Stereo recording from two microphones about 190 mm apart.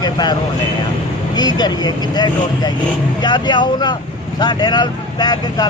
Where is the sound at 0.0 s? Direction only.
20° left (ahead or behind).